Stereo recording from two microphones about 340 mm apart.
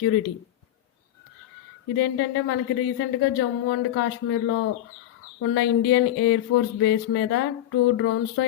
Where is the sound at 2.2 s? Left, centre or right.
Left.